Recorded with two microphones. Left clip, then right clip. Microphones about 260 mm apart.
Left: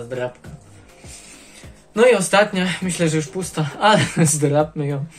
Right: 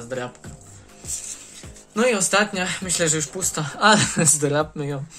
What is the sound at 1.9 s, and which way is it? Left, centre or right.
Speech, centre.